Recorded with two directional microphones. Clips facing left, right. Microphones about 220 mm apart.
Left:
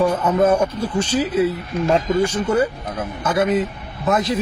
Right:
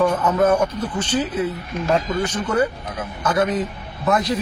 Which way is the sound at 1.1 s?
10° left (ahead or behind).